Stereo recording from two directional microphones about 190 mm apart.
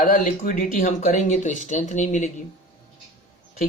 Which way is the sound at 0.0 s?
45° left (ahead or behind).